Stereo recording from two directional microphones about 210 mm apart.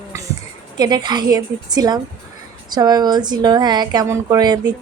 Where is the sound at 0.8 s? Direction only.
20° right (ahead or behind).